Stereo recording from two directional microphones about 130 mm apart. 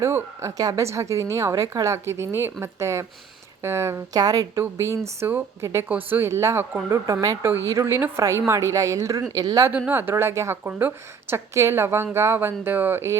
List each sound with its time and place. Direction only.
0.0 s a woman's voice: 20° right (ahead or behind)
9.6 s a woman's voice: 15° right (ahead or behind)